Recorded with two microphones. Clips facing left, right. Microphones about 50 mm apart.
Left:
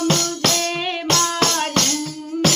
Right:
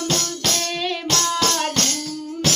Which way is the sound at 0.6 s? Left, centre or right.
Left.